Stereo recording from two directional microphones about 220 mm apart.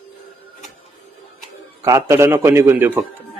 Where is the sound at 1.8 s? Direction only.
15° right (ahead or behind).